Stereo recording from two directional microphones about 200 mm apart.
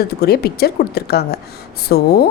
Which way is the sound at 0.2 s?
50° left (ahead or behind).